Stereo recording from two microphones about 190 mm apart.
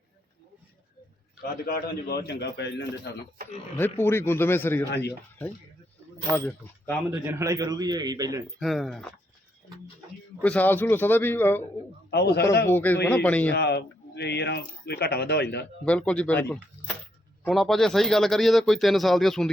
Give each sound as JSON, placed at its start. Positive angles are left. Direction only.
{"t": 1.4, "sound": "speech", "side_deg": 50}
{"t": 3.8, "sound": "a man's voice", "side_deg": 10}
{"t": 4.9, "sound": "speech", "side_deg": 65}
{"t": 6.3, "sound": "a man's voice", "side_deg": 10}
{"t": 7.3, "sound": "a man's voice", "side_deg": -15}
{"t": 8.5, "sound": "speech", "side_deg": 0}
{"t": 10.4, "sound": "a man's voice", "side_deg": 5}
{"t": 12.1, "sound": "speech", "side_deg": 60}
{"t": 12.6, "sound": "a man's voice", "side_deg": 10}
{"t": 13.5, "sound": "speech", "side_deg": 60}
{"t": 15.8, "sound": "a man's voice", "side_deg": 5}